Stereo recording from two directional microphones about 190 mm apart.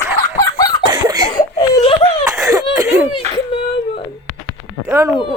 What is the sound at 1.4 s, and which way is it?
Baby cry, 30° left (ahead or behind).